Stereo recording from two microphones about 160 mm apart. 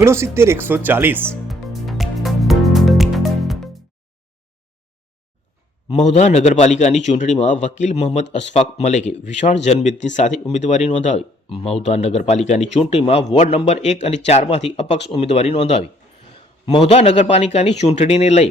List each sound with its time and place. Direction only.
0.0 s speech: 15° right (ahead or behind)
1.5 s music: centre (ahead or behind)
5.9 s a man's voice: 45° left (ahead or behind)